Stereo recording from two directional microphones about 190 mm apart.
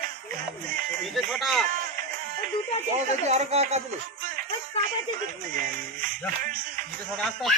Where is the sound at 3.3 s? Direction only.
35° right (ahead or behind).